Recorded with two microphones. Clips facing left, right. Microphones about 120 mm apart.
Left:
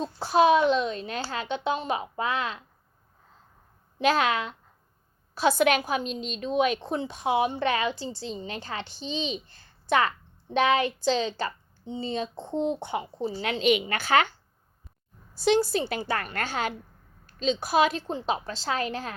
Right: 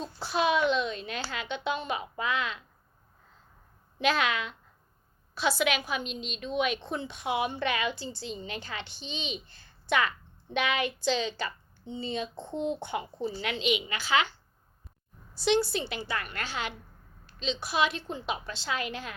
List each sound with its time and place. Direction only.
0.0 s a woman's voice: 40° left (ahead or behind)
3.9 s a woman's voice: 40° left (ahead or behind)
13.7 s a woman's voice: 50° left (ahead or behind)
15.4 s a woman's voice: 40° left (ahead or behind)